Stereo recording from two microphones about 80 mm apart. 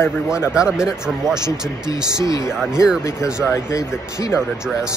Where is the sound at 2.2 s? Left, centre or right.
Left.